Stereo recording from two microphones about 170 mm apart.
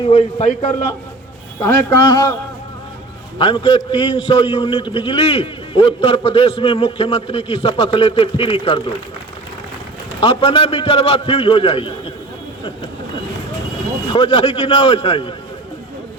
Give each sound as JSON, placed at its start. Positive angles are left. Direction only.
{"t": 0.0, "sound": "a man's voice", "side_deg": 35}
{"t": 1.5, "sound": "a man's voice", "side_deg": 20}
{"t": 10.2, "sound": "a man's voice", "side_deg": 35}
{"t": 14.1, "sound": "a man's voice", "side_deg": 30}